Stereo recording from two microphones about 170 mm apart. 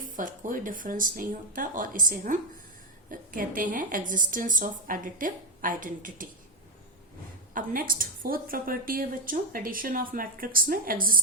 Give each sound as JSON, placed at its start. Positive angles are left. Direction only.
{"t": 0.0, "sound": "a woman's voice", "side_deg": -50}
{"t": 7.5, "sound": "a woman's voice", "side_deg": -55}